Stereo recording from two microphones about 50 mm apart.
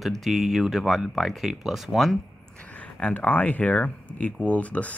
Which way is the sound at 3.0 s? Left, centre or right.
Left.